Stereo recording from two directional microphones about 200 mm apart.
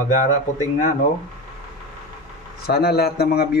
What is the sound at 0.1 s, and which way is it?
Speech, 40° left (ahead or behind).